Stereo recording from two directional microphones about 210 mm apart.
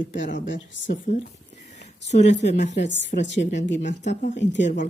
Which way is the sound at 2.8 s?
60° left (ahead or behind).